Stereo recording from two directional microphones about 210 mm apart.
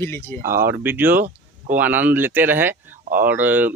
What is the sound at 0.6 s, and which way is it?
Speech, 10° right (ahead or behind).